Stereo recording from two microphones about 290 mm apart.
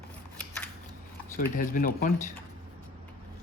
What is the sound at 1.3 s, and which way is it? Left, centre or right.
Speech, left.